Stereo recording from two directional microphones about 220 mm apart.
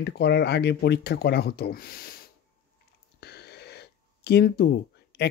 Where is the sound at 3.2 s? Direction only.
50° left (ahead or behind).